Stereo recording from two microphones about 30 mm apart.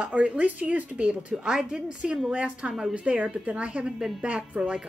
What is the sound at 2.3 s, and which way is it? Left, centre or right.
Speech, right.